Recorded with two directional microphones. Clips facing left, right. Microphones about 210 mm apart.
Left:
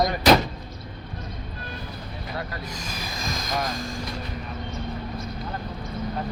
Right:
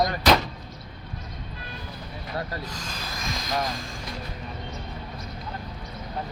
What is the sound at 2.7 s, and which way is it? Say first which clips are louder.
Speech: left 2 dB; 10° left (ahead or behind).